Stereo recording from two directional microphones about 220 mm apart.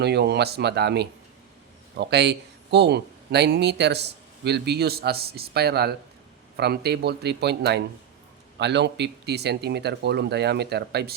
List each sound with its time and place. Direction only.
0.0 s speech: 50° right (ahead or behind)